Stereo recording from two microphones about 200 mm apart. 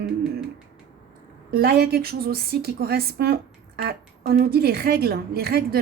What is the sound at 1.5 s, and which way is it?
A woman's voice, 50° right (ahead or behind).